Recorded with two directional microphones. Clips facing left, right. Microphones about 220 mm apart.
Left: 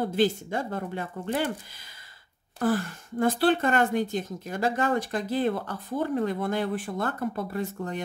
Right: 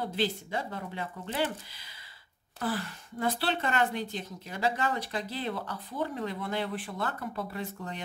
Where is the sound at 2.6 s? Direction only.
45° left (ahead or behind).